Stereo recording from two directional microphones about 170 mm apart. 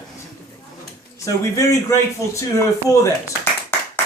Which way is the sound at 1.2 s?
20° left (ahead or behind).